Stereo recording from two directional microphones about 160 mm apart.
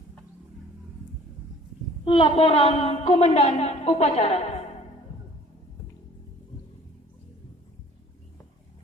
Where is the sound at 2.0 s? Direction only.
35° left (ahead or behind).